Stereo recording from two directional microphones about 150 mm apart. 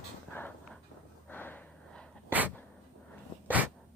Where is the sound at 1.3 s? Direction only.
10° left (ahead or behind).